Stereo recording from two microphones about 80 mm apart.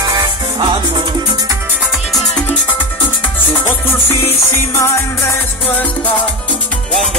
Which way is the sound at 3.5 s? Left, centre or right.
Left.